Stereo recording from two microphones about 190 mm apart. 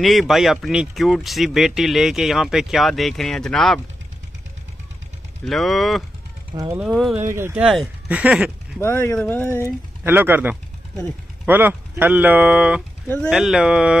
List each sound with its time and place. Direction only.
0.0 s speech: centre (ahead or behind)
5.4 s speech: centre (ahead or behind)
6.5 s speech: 20° right (ahead or behind)
6.8 s speech: centre (ahead or behind)
7.2 s speech: 15° right (ahead or behind)
8.7 s speech: 10° left (ahead or behind)
10.0 s speech: 10° right (ahead or behind)